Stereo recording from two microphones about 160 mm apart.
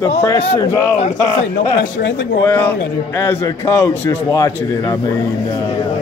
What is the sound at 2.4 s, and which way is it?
A man's voice, 15° left (ahead or behind).